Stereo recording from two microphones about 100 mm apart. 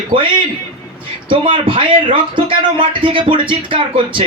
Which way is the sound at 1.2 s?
60° right (ahead or behind).